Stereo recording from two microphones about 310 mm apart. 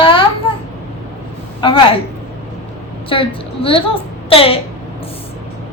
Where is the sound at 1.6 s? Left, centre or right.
Centre.